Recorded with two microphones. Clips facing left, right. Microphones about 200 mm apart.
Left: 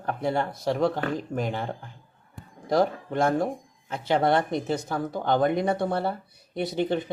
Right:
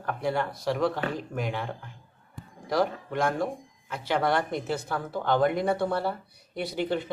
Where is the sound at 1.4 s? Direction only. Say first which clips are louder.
Even; 40° left (ahead or behind).